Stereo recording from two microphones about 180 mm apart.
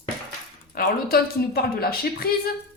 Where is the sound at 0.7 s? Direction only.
55° left (ahead or behind).